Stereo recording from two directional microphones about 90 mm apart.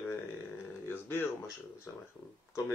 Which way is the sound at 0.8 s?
25° left (ahead or behind).